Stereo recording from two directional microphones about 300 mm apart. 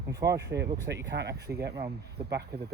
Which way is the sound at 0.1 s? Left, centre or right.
Centre.